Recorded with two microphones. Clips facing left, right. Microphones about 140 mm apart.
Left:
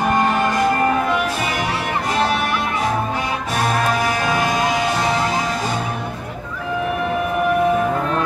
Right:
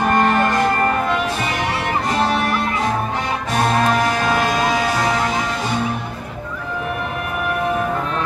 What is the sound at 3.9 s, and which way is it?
Music, 10° left (ahead or behind).